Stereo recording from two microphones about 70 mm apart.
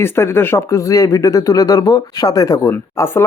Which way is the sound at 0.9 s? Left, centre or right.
Left.